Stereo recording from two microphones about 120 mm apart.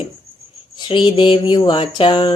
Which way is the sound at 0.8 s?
40° left (ahead or behind).